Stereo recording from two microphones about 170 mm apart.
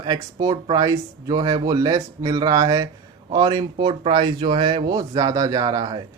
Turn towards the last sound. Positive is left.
turn(degrees=-25)  # may be behind; listen again after turning